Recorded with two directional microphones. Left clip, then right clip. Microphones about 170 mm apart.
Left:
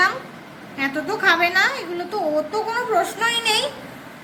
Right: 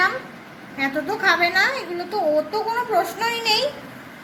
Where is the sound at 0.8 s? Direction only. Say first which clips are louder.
Left 1 dB; 30° right (ahead or behind).